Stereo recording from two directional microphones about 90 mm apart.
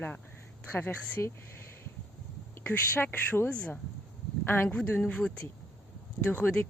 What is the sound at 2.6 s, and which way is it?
Speech, 25° left (ahead or behind).